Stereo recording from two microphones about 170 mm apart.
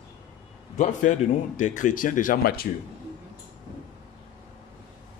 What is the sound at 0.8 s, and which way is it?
A man's voice, 45° left (ahead or behind).